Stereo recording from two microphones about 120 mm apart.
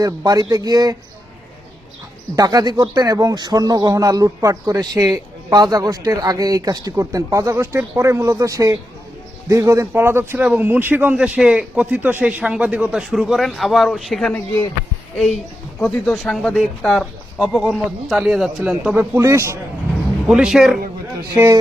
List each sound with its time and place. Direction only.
0.0 s speech: 30° right (ahead or behind)
2.3 s a man's voice: 30° right (ahead or behind); by 14.3 s centre (ahead or behind)
14.3 s speech: 15° left (ahead or behind)
15.8 s speech: 5° left (ahead or behind)
18.9 s a man's voice: 20° right (ahead or behind)
20.2 s speech: 5° right (ahead or behind)